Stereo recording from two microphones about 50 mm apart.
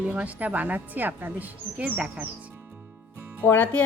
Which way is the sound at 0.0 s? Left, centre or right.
Right.